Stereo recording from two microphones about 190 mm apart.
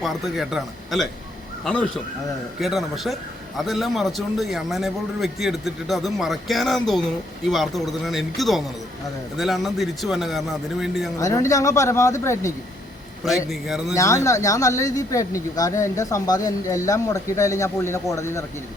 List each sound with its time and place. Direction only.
0.0 s a man's voice: centre (ahead or behind)
11.2 s speech: 15° left (ahead or behind)
13.2 s a man's voice: centre (ahead or behind)
13.9 s speech: 15° left (ahead or behind)